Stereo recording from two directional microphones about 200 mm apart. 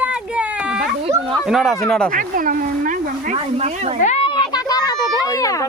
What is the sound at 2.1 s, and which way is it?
Speech, 45° right (ahead or behind).